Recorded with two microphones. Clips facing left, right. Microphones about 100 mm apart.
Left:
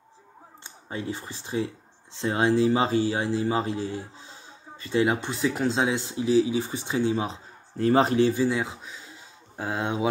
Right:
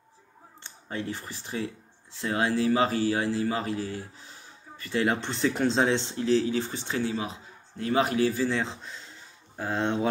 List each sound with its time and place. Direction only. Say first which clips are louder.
0.7 s a man's voice: left 1 dB; 15° left (ahead or behind)